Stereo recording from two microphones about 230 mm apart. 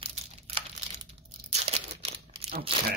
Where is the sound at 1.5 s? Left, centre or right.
Right.